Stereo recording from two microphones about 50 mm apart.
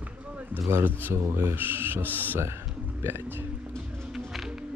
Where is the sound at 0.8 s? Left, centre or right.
Right.